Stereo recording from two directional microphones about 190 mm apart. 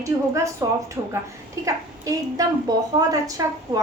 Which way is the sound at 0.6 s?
20° right (ahead or behind).